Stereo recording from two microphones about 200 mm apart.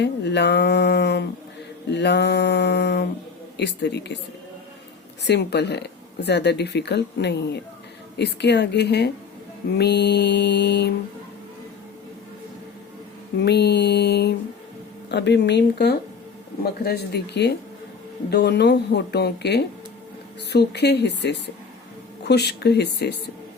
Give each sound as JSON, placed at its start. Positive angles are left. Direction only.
{"t": 0.0, "sound": "speech", "side_deg": 60}
{"t": 5.2, "sound": "speech", "side_deg": 55}
{"t": 13.3, "sound": "speech", "side_deg": 55}